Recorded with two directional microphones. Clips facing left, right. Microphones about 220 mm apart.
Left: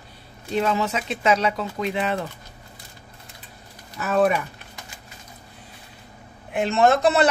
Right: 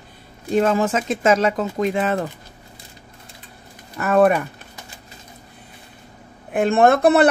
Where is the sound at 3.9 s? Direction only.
55° right (ahead or behind).